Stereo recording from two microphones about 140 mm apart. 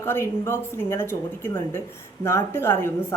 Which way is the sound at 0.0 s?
20° left (ahead or behind).